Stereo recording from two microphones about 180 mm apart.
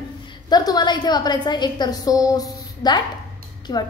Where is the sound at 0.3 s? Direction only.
20° left (ahead or behind).